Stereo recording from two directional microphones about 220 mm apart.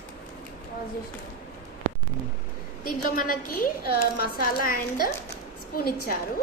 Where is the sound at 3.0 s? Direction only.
40° left (ahead or behind).